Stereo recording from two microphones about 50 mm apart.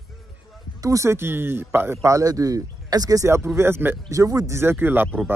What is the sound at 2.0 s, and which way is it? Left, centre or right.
Speech, right.